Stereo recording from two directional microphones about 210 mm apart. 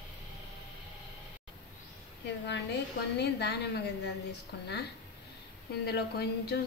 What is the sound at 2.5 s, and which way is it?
A woman's voice, 55° left (ahead or behind).